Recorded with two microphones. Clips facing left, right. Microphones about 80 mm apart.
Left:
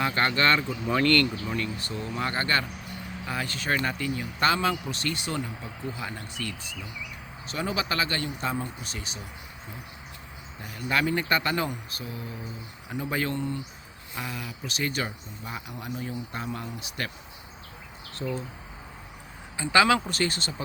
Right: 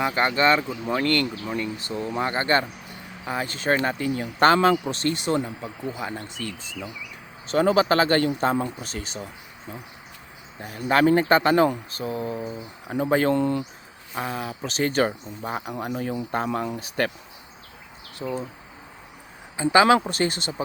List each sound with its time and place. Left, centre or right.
0.0 s speech: centre
1.9 s speech: right
4.1 s speech: right
4.9 s speech: right
7.5 s speech: right
10.6 s speech: right
13.3 s speech: right
14.2 s speech: right
17.0 s speech: right
18.1 s speech: centre
19.5 s speech: right